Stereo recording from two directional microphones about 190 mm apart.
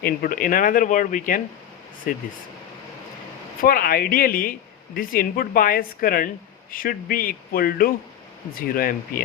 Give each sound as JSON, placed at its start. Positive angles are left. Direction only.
{"t": 0.0, "sound": "a woman's voice", "side_deg": 50}
{"t": 3.6, "sound": "a woman's voice", "side_deg": 50}